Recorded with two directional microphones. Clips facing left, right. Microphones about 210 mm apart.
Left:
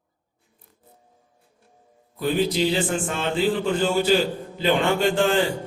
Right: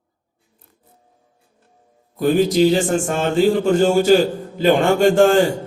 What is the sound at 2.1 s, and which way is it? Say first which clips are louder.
A man's voice: right 7 dB; 45° right (ahead or behind).